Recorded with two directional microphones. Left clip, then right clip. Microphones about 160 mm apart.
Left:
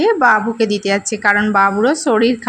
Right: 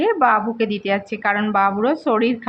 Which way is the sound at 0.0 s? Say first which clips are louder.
Left 4 dB; 30° left (ahead or behind).